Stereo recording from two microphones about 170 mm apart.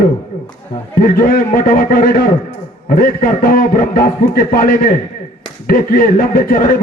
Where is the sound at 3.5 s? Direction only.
55° left (ahead or behind).